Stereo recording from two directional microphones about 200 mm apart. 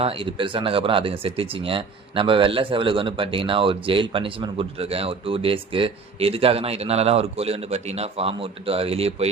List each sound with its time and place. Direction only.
0.0 s speech: 25° right (ahead or behind)